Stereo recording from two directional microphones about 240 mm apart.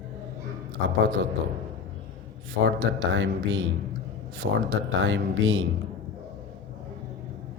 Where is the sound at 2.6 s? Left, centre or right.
Right.